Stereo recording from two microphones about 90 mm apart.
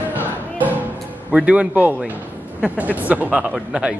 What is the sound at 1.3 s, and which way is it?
Speech, 10° right (ahead or behind).